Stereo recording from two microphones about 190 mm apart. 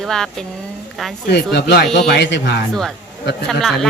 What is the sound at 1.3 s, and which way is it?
Speech, 60° left (ahead or behind).